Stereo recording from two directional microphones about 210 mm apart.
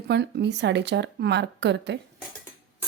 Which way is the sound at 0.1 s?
50° right (ahead or behind).